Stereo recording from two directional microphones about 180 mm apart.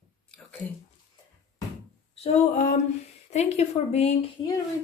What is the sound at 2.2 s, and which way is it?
A woman's voice, 40° left (ahead or behind).